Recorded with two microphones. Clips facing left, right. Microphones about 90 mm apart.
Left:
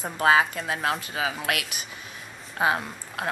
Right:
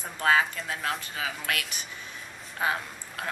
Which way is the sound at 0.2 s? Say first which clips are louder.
Left 4 dB; 10° left (ahead or behind).